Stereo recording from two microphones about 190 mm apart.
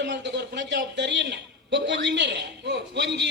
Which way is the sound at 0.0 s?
70° right (ahead or behind).